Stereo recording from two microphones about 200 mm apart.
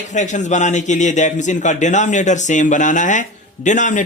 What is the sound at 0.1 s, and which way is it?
A man's voice, 35° left (ahead or behind).